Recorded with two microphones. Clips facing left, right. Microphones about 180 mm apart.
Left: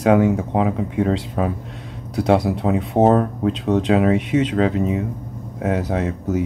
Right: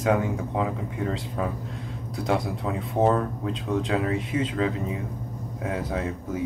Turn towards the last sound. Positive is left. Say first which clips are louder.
# left 7 dB
turn(degrees=75)  # may be behind; listen again after turning